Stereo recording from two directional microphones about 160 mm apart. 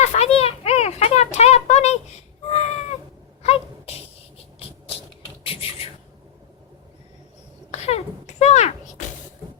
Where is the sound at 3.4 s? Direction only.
40° left (ahead or behind).